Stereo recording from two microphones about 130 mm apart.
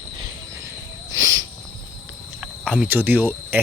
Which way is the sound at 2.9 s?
15° right (ahead or behind).